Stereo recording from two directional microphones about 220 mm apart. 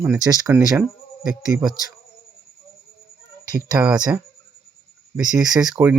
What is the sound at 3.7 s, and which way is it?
Speech, 5° right (ahead or behind).